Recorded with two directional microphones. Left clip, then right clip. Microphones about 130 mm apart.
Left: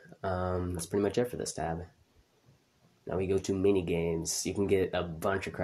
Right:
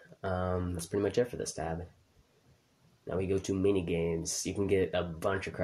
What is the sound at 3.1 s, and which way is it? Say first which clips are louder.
Speech: left 2 dB; 30° left (ahead or behind).